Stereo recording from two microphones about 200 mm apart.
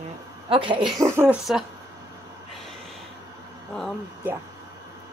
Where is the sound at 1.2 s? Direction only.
5° right (ahead or behind).